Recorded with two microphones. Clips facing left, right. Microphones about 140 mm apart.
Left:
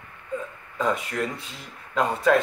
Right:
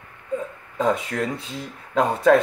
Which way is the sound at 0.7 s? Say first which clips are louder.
Right 3 dB; 35° right (ahead or behind).